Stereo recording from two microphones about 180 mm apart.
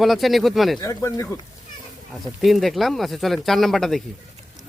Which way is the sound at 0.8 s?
15° left (ahead or behind).